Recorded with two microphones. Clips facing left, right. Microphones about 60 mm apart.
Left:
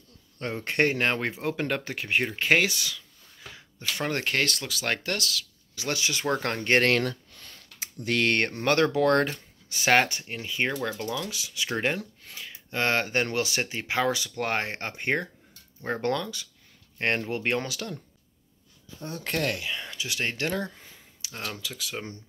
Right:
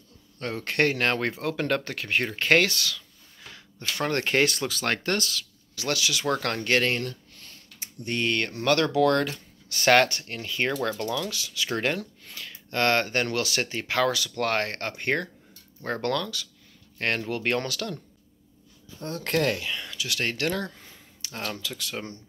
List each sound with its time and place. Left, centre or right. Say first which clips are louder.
0.4 s speech: even; centre
4.3 s speech: right 4 dB; centre
5.8 s speech: right 2 dB; centre
6.0 s speech: even; left
6.3 s speech: left 2 dB; centre
8.0 s speech: left 3 dB; left
8.3 s speech: left 2 dB; left
8.6 s speech: right 1 dB; left
9.8 s speech: right 2 dB; centre
17.4 s speech: right 1 dB; centre
19.8 s a sound: right 1 dB; left
20.2 s speech: right 1 dB; centre
21.2 s speech: right 2 dB; centre